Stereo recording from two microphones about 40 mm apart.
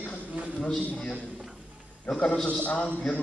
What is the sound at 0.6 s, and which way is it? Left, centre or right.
Speech, left.